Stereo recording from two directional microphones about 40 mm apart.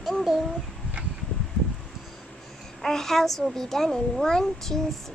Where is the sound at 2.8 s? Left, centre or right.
Centre.